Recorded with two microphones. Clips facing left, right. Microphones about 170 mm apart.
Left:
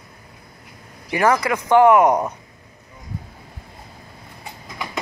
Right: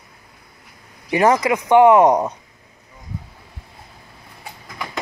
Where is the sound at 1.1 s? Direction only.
20° right (ahead or behind).